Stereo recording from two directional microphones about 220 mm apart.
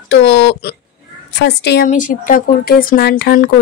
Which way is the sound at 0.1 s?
50° left (ahead or behind).